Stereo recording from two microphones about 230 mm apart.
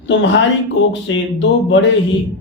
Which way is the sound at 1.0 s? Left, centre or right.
Left.